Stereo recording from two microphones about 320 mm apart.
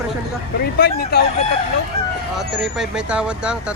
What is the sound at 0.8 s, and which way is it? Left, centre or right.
Speech, left.